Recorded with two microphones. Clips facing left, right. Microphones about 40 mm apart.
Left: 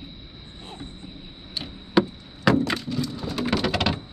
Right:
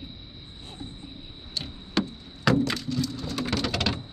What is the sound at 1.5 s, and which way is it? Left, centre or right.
Wood, centre.